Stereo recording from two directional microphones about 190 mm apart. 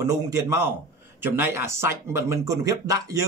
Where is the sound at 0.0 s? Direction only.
15° right (ahead or behind).